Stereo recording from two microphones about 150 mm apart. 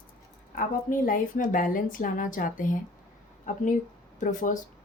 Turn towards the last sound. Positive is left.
turn(degrees=60)  # may be behind; listen again after turning